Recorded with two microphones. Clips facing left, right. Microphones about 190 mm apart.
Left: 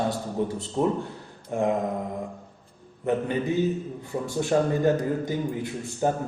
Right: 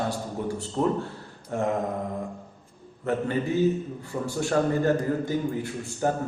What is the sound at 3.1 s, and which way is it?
Speech, 15° left (ahead or behind).